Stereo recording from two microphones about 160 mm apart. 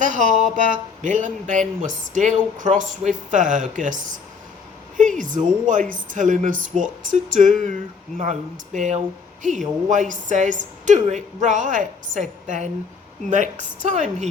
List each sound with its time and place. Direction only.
0.0 s speech: 50° right (ahead or behind)